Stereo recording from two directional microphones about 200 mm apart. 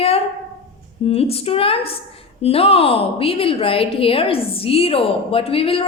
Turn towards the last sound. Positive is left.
turn(degrees=30)  # may be behind; listen again after turning